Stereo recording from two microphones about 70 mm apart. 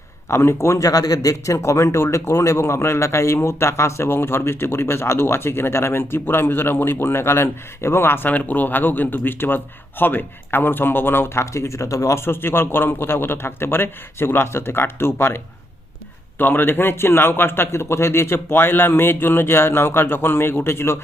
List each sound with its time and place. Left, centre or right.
0.3 s speech: left
0.9 s speech: left
16.4 s speech: left